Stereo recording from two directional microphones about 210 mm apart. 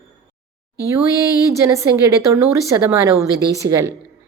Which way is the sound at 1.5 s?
15° right (ahead or behind).